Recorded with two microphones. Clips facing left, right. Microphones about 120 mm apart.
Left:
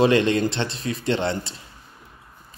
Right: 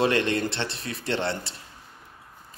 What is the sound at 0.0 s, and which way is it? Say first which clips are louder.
A man's voice: left 5 dB; 15° left (ahead or behind).